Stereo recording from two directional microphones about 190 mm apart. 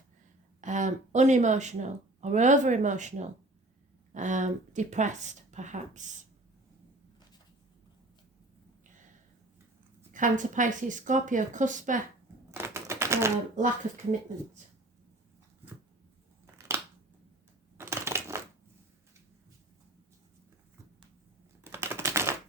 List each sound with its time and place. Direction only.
0.6 s speech: 40° right (ahead or behind)
10.1 s speech: 45° right (ahead or behind)
12.5 s typewriter: 15° right (ahead or behind)
16.6 s crushing: 15° right (ahead or behind)
21.6 s typewriter: 15° right (ahead or behind)